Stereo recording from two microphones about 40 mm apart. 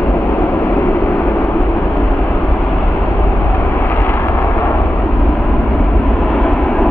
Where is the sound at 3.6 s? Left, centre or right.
Left.